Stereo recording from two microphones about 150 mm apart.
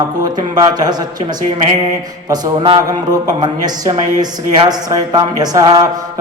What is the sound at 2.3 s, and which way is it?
Speech, 25° right (ahead or behind).